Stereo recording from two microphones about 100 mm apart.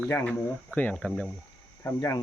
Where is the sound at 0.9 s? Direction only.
5° left (ahead or behind).